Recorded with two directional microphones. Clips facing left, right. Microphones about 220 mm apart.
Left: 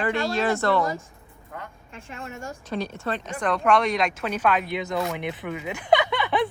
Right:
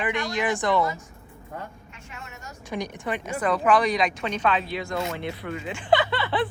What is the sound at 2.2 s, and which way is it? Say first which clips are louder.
Speech: left 11 dB; 50° left (ahead or behind).